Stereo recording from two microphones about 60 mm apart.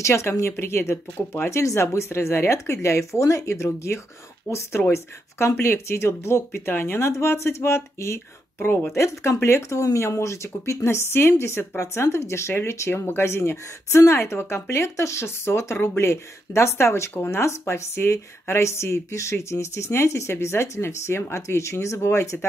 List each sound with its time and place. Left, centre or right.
0.0 s speech: left
7.1 s speech: left
8.5 s a woman's voice: left
8.9 s speech: left